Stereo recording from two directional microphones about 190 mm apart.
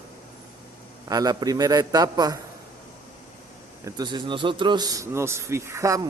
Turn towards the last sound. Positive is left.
turn(degrees=-15)  # may be behind; listen again after turning